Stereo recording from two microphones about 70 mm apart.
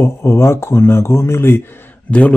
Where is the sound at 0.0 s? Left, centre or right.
Left.